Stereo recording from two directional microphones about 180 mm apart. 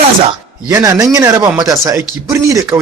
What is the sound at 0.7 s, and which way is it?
Speech, 15° right (ahead or behind).